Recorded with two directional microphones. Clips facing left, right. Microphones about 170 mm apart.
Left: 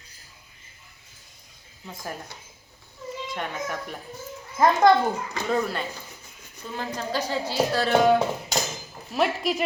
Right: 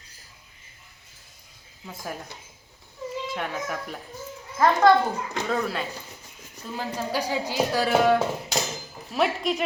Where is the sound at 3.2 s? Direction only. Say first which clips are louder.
Left 1 dB; centre (ahead or behind).